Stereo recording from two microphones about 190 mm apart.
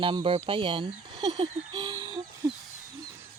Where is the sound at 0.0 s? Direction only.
25° right (ahead or behind).